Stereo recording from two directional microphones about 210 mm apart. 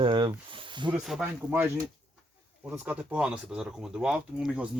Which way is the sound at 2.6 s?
5° right (ahead or behind).